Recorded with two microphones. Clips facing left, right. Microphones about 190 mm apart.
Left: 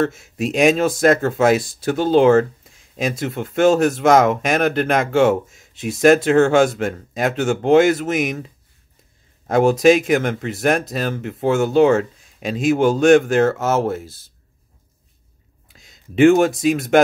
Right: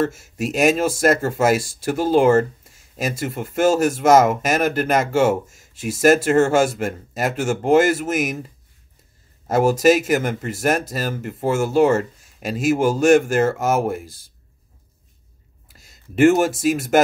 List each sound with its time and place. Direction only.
0.0 s speech: 5° right (ahead or behind)
9.5 s speech: 5° right (ahead or behind)
15.7 s speech: 5° right (ahead or behind)